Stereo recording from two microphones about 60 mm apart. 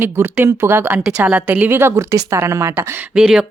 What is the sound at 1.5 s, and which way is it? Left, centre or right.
Speech, right.